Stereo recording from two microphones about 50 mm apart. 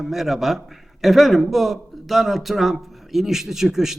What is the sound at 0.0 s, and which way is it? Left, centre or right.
A man's voice, centre.